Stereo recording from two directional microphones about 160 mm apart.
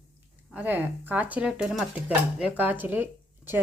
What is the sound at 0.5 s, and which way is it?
Speech, 10° right (ahead or behind).